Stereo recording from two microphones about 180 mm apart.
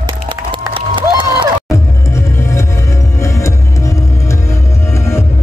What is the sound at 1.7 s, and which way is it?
Music, 15° left (ahead or behind).